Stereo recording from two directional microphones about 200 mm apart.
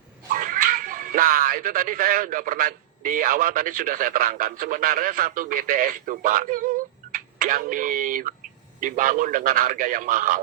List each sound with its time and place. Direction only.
0.5 s speech: 40° right (ahead or behind)